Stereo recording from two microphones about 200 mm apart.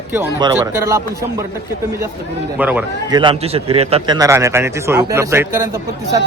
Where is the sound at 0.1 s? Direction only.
15° right (ahead or behind).